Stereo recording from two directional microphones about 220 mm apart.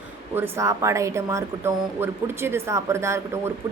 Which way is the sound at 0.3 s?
10° right (ahead or behind).